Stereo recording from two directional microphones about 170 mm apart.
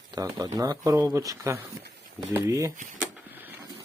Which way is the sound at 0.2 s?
20° right (ahead or behind).